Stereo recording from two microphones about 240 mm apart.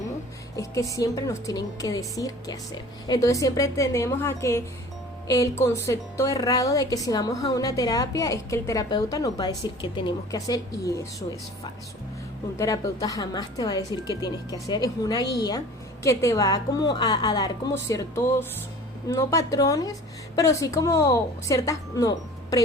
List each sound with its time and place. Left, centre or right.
0.5 s speech: centre
12.5 s speech: centre